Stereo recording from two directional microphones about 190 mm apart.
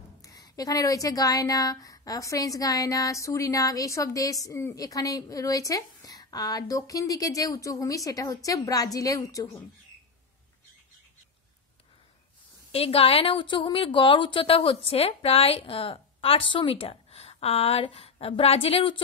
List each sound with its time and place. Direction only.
0.2 s a woman's voice: 20° left (ahead or behind)
12.7 s a woman's voice: 30° left (ahead or behind)